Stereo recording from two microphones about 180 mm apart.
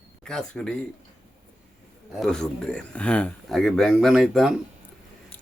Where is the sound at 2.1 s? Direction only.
Centre (ahead or behind).